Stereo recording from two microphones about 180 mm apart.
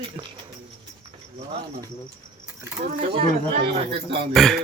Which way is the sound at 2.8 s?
40° right (ahead or behind).